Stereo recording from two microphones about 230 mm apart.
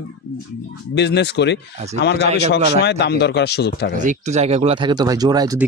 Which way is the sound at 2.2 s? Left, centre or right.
Right.